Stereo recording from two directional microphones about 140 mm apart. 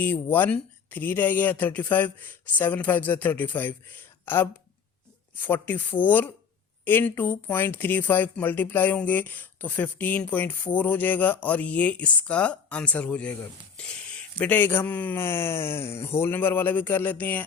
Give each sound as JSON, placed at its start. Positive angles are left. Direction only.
{"t": 0.0, "sound": "speech", "side_deg": 15}
{"t": 5.4, "sound": "speech", "side_deg": 15}
{"t": 14.3, "sound": "speech", "side_deg": 15}